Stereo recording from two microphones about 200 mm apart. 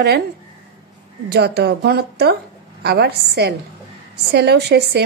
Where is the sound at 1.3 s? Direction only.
55° right (ahead or behind).